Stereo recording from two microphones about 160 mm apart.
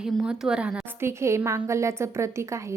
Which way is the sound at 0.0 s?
5° right (ahead or behind).